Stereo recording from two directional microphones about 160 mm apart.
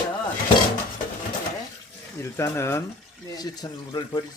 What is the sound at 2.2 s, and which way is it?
Speech, 15° left (ahead or behind).